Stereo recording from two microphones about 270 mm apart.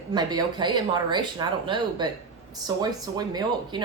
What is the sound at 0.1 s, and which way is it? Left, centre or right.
Speech, centre.